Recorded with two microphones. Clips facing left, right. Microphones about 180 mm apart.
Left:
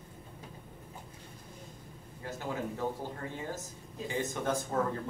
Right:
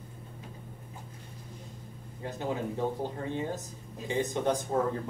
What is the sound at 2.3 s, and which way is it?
Speech, 20° right (ahead or behind).